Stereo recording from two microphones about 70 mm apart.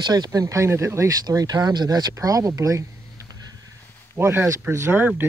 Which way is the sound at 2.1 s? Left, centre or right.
Right.